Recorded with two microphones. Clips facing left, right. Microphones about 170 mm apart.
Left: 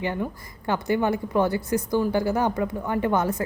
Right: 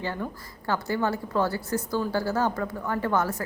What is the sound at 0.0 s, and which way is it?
A woman's voice, 15° left (ahead or behind).